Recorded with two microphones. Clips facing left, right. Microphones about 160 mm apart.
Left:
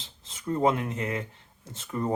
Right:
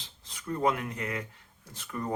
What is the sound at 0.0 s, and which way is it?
Speech, 25° left (ahead or behind).